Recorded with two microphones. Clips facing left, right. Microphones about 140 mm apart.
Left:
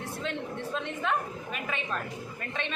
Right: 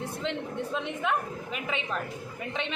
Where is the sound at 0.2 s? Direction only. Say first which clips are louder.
Right 1 dB; 15° right (ahead or behind).